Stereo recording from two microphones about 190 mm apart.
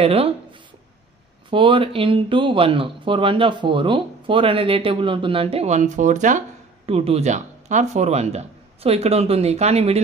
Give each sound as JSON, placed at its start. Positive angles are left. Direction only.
{"t": 0.0, "sound": "speech", "side_deg": -30}
{"t": 1.5, "sound": "speech", "side_deg": -25}